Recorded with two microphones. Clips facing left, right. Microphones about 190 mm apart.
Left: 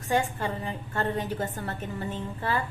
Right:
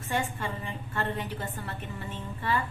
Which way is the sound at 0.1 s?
40° left (ahead or behind).